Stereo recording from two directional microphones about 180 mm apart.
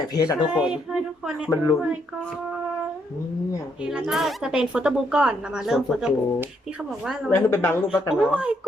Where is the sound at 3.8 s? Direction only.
5° right (ahead or behind).